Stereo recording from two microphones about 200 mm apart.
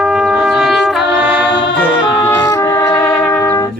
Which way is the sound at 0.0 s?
5° right (ahead or behind).